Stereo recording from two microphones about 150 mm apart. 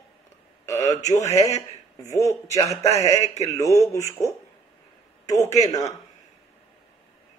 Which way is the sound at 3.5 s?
20° left (ahead or behind).